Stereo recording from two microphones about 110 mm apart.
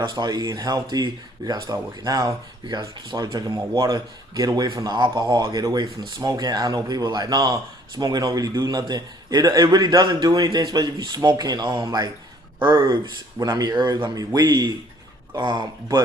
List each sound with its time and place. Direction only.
0.0 s speech: 40° right (ahead or behind)
5.4 s speech: 35° right (ahead or behind)